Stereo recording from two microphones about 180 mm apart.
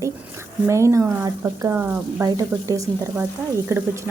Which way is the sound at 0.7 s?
15° right (ahead or behind).